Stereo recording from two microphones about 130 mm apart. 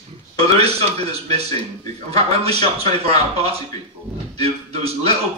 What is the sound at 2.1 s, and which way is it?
A man's voice, 50° right (ahead or behind).